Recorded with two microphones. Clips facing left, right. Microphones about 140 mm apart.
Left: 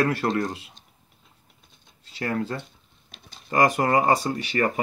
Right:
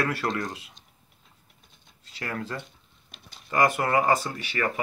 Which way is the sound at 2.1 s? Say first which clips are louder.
Left 6 dB; 35° left (ahead or behind).